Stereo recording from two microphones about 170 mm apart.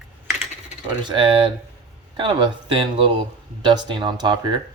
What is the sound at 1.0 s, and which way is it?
Speech, 30° right (ahead or behind).